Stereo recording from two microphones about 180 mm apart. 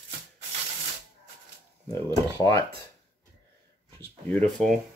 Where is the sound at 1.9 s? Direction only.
20° left (ahead or behind).